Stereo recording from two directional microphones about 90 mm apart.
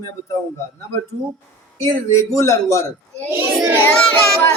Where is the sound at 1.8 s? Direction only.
35° left (ahead or behind).